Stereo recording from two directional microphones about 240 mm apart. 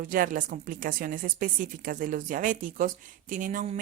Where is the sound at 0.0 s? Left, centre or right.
Right.